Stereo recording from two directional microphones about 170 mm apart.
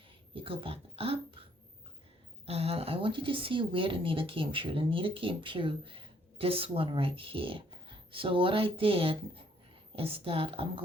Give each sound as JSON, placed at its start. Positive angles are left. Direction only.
{"t": 0.3, "sound": "speech", "side_deg": -30}
{"t": 2.5, "sound": "speech", "side_deg": -35}